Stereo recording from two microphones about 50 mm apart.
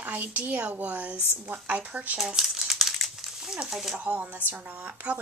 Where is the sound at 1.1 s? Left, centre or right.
Left.